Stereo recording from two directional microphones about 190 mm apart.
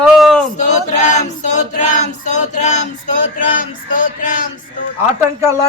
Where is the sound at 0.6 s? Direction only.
40° left (ahead or behind).